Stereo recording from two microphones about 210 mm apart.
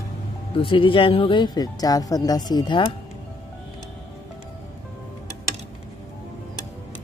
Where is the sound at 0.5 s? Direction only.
25° left (ahead or behind).